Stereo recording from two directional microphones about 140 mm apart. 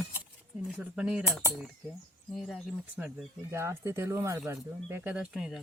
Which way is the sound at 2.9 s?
10° right (ahead or behind).